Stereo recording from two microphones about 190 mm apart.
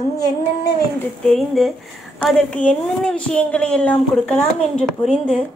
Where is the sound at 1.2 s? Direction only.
Centre (ahead or behind).